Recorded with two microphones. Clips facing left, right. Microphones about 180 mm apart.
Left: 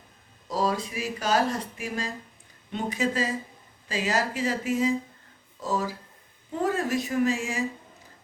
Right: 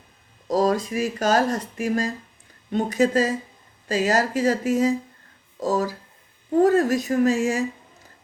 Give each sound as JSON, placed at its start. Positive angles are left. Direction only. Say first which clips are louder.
{"t": 0.4, "sound": "speech", "louder": "right 6 dB", "side_deg": -45}